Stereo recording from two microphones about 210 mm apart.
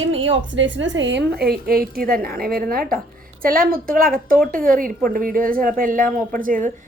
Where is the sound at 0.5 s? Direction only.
60° right (ahead or behind).